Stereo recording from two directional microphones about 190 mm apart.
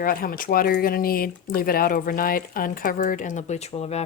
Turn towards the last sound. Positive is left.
turn(degrees=35)  # may be behind; listen again after turning